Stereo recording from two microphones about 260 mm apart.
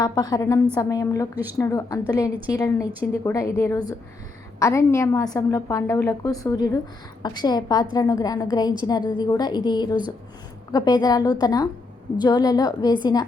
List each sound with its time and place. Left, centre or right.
0.0 s a woman's voice: centre